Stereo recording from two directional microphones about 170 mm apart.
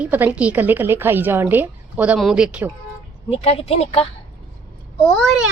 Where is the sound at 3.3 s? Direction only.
35° left (ahead or behind).